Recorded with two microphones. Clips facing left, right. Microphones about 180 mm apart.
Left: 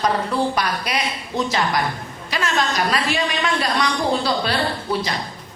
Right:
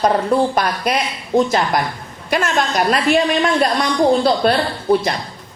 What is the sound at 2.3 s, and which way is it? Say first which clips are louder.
Speech: right 5 dB; 55° right (ahead or behind).